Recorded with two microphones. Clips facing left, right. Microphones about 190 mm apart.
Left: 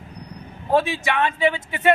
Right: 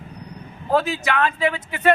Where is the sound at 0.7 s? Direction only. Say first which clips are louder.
Even; 25° left (ahead or behind).